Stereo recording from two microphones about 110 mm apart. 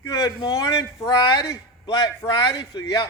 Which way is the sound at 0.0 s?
35° left (ahead or behind).